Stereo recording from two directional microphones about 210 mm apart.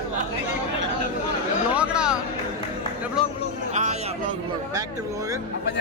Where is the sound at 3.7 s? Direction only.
35° right (ahead or behind).